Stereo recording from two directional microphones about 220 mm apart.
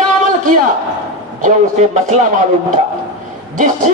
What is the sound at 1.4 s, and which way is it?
A man's voice, 30° right (ahead or behind).